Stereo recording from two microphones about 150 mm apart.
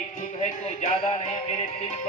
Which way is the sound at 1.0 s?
35° left (ahead or behind).